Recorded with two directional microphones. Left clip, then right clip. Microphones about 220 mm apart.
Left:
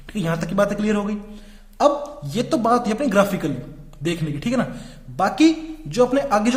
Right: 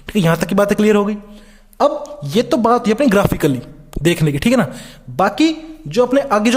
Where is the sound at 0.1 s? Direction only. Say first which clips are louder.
Right 9 dB; 45° right (ahead or behind).